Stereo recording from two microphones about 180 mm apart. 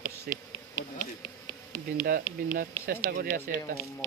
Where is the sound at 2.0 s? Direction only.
55° right (ahead or behind).